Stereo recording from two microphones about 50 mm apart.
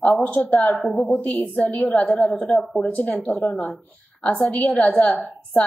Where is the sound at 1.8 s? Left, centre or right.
Left.